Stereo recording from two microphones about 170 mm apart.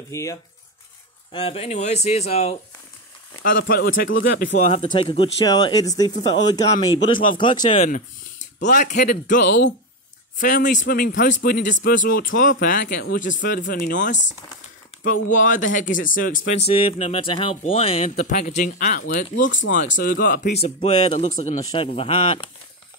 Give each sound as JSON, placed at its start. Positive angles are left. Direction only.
{"t": 0.1, "sound": "speech", "side_deg": 20}
{"t": 1.3, "sound": "speech", "side_deg": 35}
{"t": 3.5, "sound": "speech", "side_deg": 80}
{"t": 4.6, "sound": "speech", "side_deg": 40}
{"t": 7.8, "sound": "speech", "side_deg": 45}
{"t": 12.8, "sound": "speech", "side_deg": 90}
{"t": 13.1, "sound": "speech", "side_deg": 50}
{"t": 16.7, "sound": "speech", "side_deg": 35}
{"t": 20.6, "sound": "speech", "side_deg": 35}